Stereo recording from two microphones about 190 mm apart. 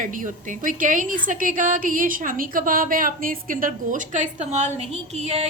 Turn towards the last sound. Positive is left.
turn(degrees=-35)  # may be behind; listen again after turning